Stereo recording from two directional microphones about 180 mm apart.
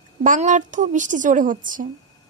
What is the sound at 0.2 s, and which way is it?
Speech, 45° right (ahead or behind).